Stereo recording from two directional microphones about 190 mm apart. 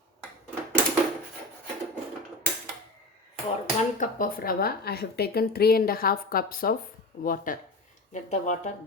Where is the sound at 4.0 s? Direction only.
45° left (ahead or behind).